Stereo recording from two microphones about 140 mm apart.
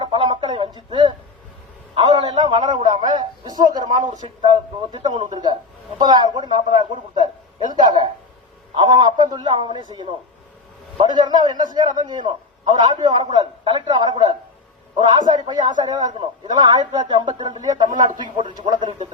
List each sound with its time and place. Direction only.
0.0 s a sound: 35° right (ahead or behind)
2.0 s a man's voice: 35° right (ahead or behind)
15.4 s a man's voice: 30° right (ahead or behind)